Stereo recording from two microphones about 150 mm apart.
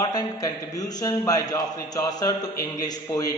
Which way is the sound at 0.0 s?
25° left (ahead or behind).